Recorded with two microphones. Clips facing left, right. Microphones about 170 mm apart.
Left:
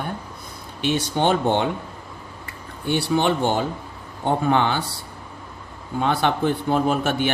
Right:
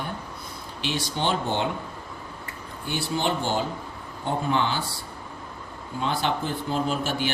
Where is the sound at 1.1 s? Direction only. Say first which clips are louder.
Left 6 dB; 55° left (ahead or behind).